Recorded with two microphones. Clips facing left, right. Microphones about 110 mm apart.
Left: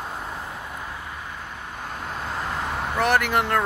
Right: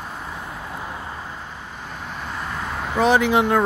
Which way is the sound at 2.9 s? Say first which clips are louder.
Right 5 dB; 15° right (ahead or behind).